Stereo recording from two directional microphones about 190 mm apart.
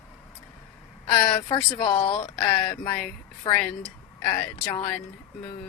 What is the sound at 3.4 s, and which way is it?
Speech, 25° left (ahead or behind).